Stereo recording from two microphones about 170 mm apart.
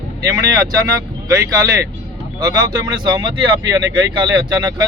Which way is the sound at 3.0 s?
25° right (ahead or behind).